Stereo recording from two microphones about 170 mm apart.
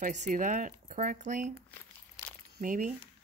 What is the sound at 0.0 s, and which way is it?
Speech, 45° right (ahead or behind).